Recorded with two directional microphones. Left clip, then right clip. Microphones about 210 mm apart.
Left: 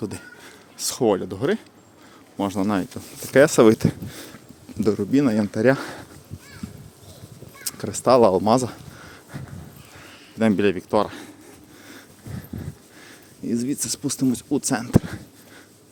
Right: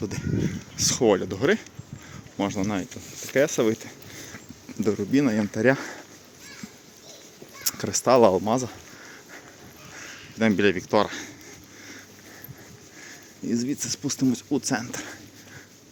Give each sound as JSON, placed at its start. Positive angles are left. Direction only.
{"t": 0.8, "sound": "speech", "side_deg": 10}
{"t": 2.4, "sound": "speech", "side_deg": 25}
{"t": 4.8, "sound": "speech", "side_deg": 15}
{"t": 7.6, "sound": "speech", "side_deg": 5}
{"t": 10.3, "sound": "speech", "side_deg": 15}
{"t": 13.1, "sound": "speech", "side_deg": 15}